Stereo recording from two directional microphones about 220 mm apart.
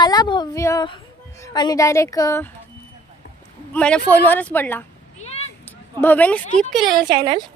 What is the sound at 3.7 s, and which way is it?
Speech, 5° left (ahead or behind).